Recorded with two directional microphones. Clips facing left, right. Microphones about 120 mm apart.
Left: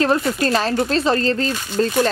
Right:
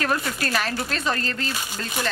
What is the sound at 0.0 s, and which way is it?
Speech, 25° left (ahead or behind).